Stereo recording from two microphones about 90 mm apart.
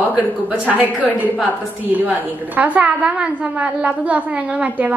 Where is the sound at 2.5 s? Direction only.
15° right (ahead or behind).